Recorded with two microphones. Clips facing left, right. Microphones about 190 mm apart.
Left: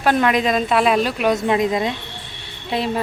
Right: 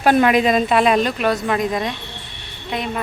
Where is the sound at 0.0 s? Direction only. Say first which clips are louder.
Right 3 dB; 10° right (ahead or behind); by 1.3 s 5° left (ahead or behind).